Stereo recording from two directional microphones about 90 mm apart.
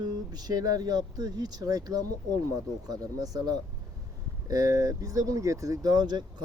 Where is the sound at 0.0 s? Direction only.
50° right (ahead or behind).